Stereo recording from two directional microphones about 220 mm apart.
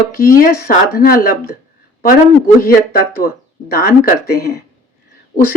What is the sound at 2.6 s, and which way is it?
Speech, 45° left (ahead or behind).